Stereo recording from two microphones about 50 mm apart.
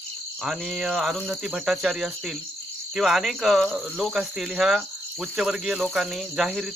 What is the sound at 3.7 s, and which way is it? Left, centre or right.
Cricket, centre.